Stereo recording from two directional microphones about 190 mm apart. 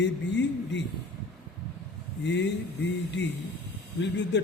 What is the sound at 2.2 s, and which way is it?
A man's voice, 70° left (ahead or behind).